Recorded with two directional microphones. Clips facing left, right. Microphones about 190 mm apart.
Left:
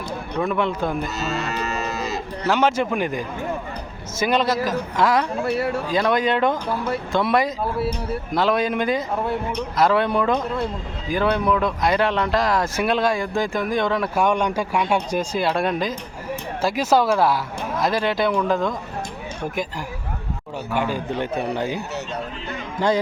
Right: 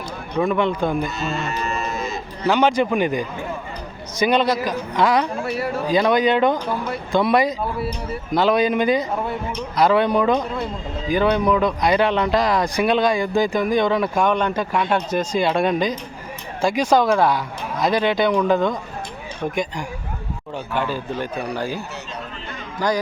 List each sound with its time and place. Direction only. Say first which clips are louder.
0.3 s a man's voice: right 3 dB; centre (ahead or behind)
1.2 s moo: even; 40° left (ahead or behind)
2.4 s a man's voice: right 3 dB; centre (ahead or behind)
14.3 s a man's voice: right 1 dB; 10° left (ahead or behind)
20.7 s a man's voice: left 1 dB; 15° left (ahead or behind)
22.8 s a man's voice: left 1 dB; 25° left (ahead or behind)